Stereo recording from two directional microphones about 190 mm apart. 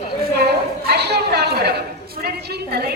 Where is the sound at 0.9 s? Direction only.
60° right (ahead or behind).